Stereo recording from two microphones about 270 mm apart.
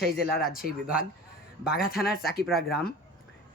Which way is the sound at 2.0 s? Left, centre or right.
Centre.